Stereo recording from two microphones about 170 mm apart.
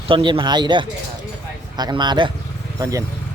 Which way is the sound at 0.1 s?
30° right (ahead or behind).